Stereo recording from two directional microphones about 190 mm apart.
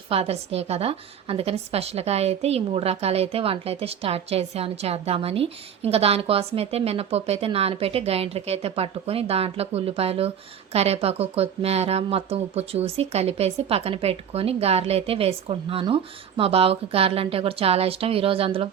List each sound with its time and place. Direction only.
0.1 s a woman's voice: 30° right (ahead or behind)